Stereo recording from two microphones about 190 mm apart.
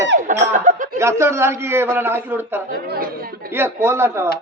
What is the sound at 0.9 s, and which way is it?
A man's voice, 15° right (ahead or behind).